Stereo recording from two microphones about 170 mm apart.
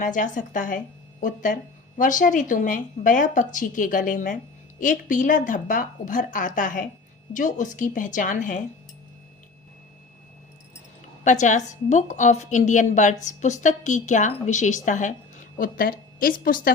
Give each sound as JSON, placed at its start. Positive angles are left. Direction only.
{"t": 0.0, "sound": "a woman's voice", "side_deg": 50}
{"t": 11.2, "sound": "a woman's voice", "side_deg": 45}